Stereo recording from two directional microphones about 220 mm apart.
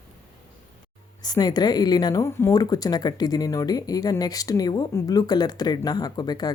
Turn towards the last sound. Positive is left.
turn(degrees=15)  # may be behind; listen again after turning